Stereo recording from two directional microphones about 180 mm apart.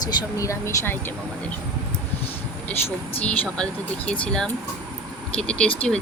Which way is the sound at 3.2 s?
5° left (ahead or behind).